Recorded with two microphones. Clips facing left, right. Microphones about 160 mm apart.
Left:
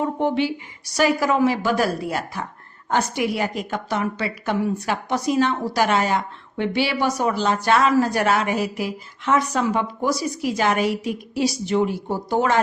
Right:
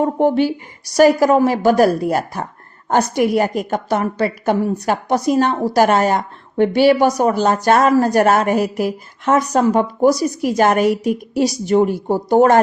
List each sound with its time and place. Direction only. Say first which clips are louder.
0.0 s a woman's voice: right 6 dB; 45° right (ahead or behind)